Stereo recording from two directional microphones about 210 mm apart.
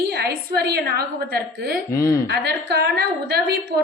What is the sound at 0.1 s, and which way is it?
A woman's voice, 50° right (ahead or behind).